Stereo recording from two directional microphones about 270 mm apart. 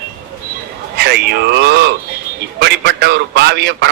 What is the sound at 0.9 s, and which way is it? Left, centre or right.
A man's voice, right.